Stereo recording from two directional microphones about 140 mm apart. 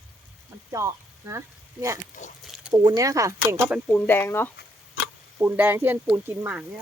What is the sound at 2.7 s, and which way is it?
Speech, 30° right (ahead or behind).